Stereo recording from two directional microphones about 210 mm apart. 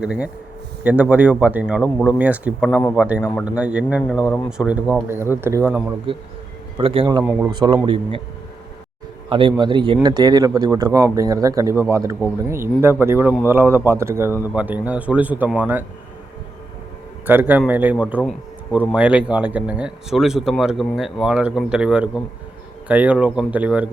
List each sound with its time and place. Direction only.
0.0 s speech: 5° right (ahead or behind)
2.6 s speech: 10° left (ahead or behind)
2.9 s speech: 5° right (ahead or behind)
6.1 s a man's voice: 25° right (ahead or behind)
9.3 s speech: 25° right (ahead or behind); by 15.8 s 10° right (ahead or behind)
17.2 s speech: 10° right (ahead or behind)